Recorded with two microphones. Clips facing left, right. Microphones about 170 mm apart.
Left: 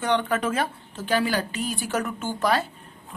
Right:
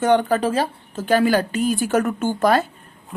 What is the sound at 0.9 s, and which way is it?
Speech, 45° right (ahead or behind).